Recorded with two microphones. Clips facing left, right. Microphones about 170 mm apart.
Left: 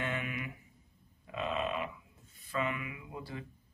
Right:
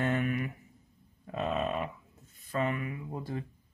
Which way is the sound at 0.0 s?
45° right (ahead or behind).